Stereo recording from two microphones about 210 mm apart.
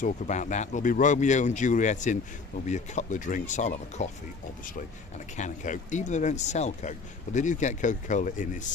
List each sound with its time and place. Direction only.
0.0 s speech: 35° left (ahead or behind)
5.4 s speech: 35° left (ahead or behind)